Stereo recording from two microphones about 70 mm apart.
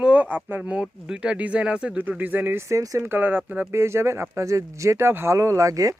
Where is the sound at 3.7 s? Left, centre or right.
Right.